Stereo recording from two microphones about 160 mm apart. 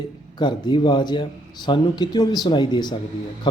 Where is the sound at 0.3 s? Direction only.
30° left (ahead or behind).